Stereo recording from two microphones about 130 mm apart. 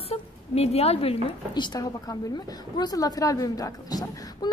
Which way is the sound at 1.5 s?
35° left (ahead or behind).